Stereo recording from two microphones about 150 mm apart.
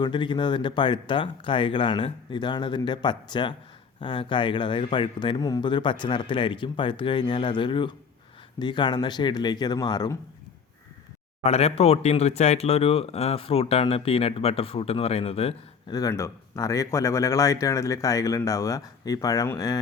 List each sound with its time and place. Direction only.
0.0 s speech: 30° left (ahead or behind)
11.4 s speech: 40° left (ahead or behind)
15.9 s speech: 20° left (ahead or behind)